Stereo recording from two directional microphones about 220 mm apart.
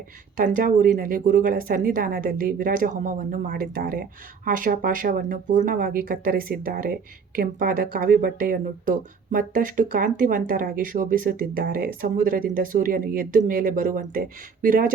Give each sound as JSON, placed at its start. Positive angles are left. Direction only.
{"t": 0.3, "sound": "speech", "side_deg": -40}